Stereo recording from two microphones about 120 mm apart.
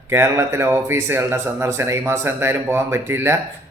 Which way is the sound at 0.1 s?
20° right (ahead or behind).